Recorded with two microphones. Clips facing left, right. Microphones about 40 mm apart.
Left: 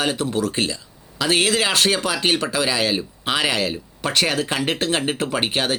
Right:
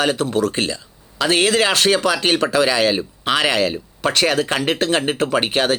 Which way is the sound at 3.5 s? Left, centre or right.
Right.